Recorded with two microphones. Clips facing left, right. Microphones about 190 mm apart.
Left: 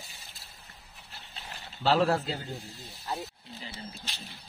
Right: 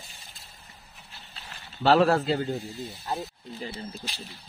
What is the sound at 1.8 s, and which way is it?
Speech, 65° right (ahead or behind).